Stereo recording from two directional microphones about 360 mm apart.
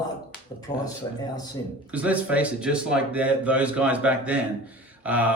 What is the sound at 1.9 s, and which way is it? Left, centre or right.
Speech, centre.